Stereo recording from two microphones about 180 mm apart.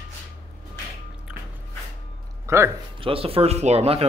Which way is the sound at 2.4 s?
15° right (ahead or behind).